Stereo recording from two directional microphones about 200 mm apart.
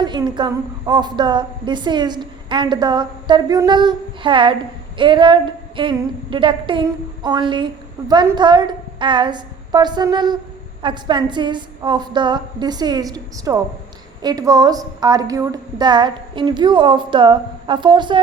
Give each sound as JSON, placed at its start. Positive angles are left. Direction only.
{"t": 0.0, "sound": "a woman's voice", "side_deg": -20}